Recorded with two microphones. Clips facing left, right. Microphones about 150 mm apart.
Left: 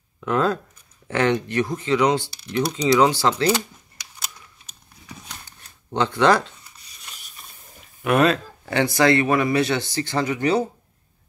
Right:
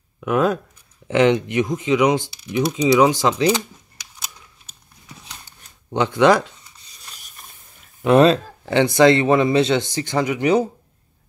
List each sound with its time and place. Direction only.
0.2 s speech: 15° right (ahead or behind)
5.9 s speech: 15° right (ahead or behind)
8.0 s speech: 25° right (ahead or behind)